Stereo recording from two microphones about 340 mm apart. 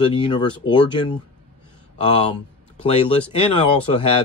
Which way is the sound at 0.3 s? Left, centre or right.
Centre.